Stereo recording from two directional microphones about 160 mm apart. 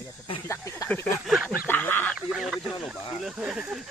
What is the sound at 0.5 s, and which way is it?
Snake, 15° left (ahead or behind).